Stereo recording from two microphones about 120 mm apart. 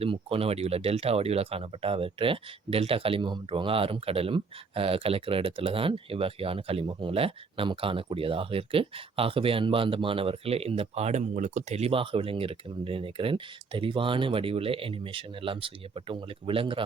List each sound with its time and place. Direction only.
0.0 s speech: 50° right (ahead or behind)